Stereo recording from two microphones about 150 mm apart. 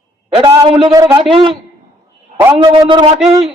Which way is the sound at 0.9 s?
25° right (ahead or behind).